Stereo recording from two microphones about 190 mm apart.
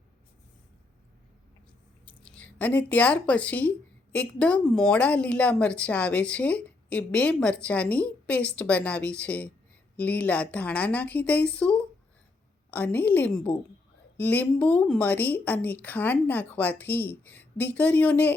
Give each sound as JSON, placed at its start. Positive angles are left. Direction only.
{"t": 2.0, "sound": "speech", "side_deg": 5}